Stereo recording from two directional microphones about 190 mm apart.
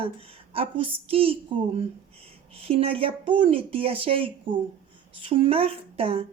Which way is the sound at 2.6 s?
30° right (ahead or behind).